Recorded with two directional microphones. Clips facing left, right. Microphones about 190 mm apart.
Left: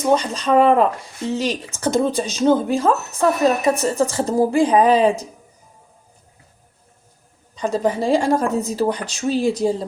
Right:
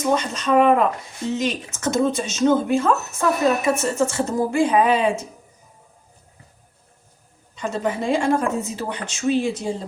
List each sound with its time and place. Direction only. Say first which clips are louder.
0.1 s speech: left 3 dB; 35° left (ahead or behind)
7.5 s speech: left 4 dB; 35° left (ahead or behind)